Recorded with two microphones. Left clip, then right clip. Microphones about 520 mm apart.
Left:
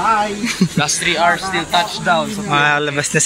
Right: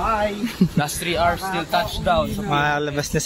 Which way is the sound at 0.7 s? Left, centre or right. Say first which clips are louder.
Left 7 dB; right.